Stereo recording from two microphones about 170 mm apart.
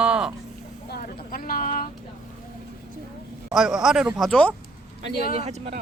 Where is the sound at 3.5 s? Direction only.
Centre (ahead or behind).